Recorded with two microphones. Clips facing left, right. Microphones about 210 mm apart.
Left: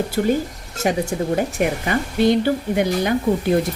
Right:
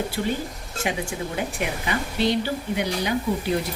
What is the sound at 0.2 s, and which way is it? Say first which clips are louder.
Speech: left 7 dB; 45° left (ahead or behind).